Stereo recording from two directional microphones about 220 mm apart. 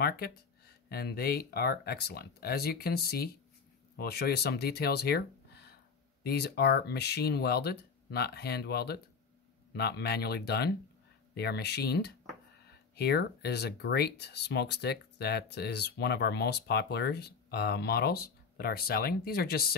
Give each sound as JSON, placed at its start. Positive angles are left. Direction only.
{"t": 0.0, "sound": "speech", "side_deg": 45}